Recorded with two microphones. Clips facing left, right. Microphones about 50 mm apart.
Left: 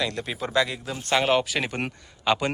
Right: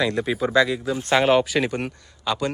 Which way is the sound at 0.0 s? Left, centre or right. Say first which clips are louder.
Right 6 dB; centre.